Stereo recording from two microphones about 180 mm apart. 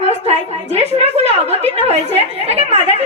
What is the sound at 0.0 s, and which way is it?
A woman's voice, 35° right (ahead or behind).